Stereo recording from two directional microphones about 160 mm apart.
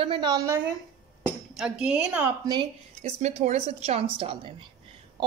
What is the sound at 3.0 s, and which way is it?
Speech, 45° right (ahead or behind).